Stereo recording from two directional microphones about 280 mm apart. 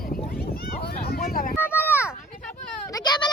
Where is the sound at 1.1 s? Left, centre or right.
Left.